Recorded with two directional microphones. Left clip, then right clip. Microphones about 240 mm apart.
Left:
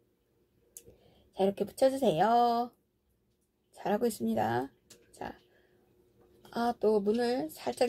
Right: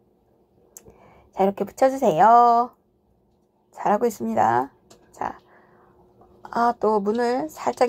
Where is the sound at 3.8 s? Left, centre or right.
Centre.